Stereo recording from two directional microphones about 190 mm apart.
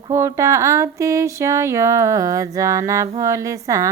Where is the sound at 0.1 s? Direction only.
15° right (ahead or behind).